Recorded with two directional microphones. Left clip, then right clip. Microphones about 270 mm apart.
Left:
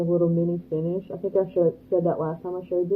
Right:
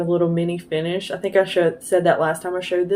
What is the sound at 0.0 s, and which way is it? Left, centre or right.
Speech, right.